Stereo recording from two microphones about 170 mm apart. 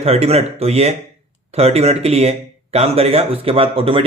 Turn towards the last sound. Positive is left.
turn(degrees=-30)  # may be behind; listen again after turning